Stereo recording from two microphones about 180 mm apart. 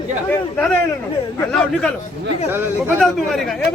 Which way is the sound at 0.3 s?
10° left (ahead or behind).